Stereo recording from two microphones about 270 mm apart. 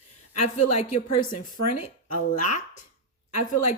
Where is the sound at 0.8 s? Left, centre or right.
Left.